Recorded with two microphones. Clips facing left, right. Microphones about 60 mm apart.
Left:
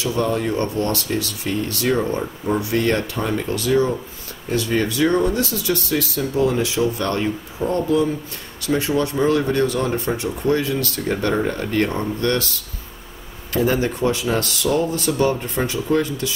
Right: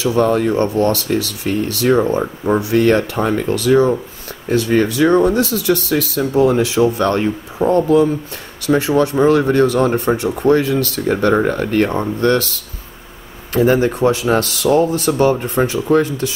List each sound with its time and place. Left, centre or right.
0.0 s speech: right
0.6 s speech: right
0.9 s speech: right
2.7 s speech: right
5.1 s speech: right
5.4 s speech: right
7.1 s speech: right
8.6 s speech: right
11.9 s speech: right
13.8 s speech: right